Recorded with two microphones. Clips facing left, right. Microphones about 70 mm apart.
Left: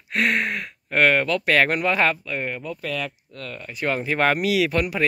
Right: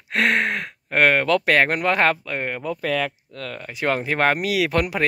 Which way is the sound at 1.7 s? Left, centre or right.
Right.